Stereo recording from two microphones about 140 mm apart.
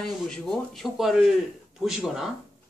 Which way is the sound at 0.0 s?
5° left (ahead or behind).